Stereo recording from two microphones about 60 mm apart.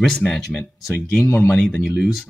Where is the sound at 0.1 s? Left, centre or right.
Centre.